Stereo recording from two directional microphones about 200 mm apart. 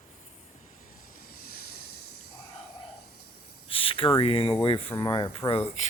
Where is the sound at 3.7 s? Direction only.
25° left (ahead or behind).